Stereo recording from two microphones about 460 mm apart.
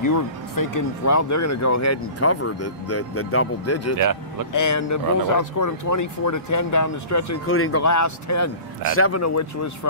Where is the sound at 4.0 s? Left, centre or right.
Right.